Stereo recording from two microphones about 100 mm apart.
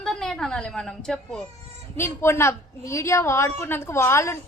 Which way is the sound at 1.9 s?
25° left (ahead or behind).